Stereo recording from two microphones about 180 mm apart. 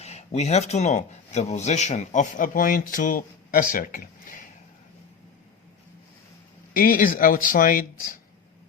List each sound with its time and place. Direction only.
0.0 s speech: 35° left (ahead or behind)
6.7 s speech: 50° left (ahead or behind)